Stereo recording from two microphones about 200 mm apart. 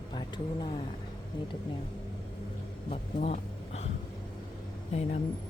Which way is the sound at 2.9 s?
35° left (ahead or behind).